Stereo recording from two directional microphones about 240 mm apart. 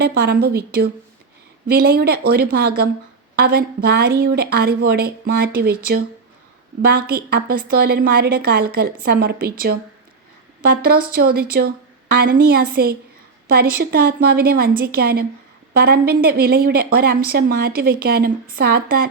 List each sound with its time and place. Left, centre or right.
0.0 s a woman's voice: right
11.1 s a woman's voice: right